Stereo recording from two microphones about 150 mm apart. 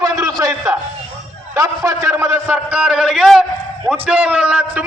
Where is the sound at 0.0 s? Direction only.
25° right (ahead or behind).